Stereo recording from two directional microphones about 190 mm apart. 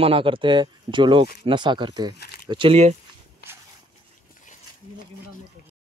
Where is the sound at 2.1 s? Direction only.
55° left (ahead or behind).